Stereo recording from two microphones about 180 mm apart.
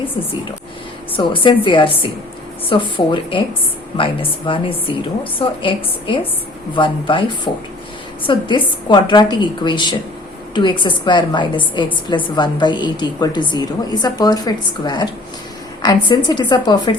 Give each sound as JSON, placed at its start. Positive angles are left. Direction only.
{"t": 1.1, "sound": "a woman's voice", "side_deg": 30}